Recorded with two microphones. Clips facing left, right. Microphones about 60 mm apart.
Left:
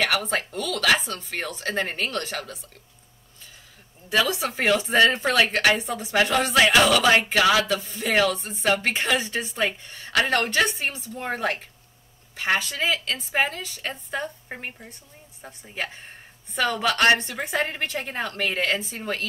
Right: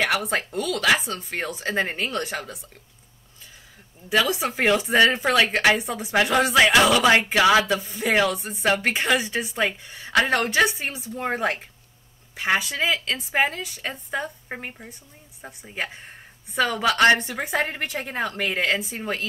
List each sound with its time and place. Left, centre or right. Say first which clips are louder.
0.0 s speech: right 1 dB; centre
0.4 s a woman's voice: right 2 dB; right
4.1 s music: right 1 dB; right
4.9 s speech: even; centre
5.5 s a woman's voice: right 1 dB; centre
6.7 s music: right 1 dB; centre
9.3 s a woman's voice: right 1 dB; centre
15.4 s music: right 1 dB; centre
16.5 s a woman's voice: right 2 dB; centre